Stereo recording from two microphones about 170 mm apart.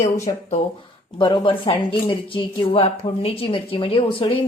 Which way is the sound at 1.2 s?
30° left (ahead or behind).